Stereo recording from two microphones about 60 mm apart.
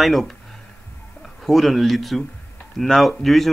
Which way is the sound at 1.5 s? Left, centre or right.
Centre.